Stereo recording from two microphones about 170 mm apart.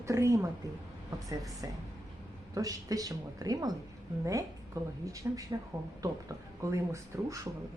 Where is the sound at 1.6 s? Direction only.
20° right (ahead or behind).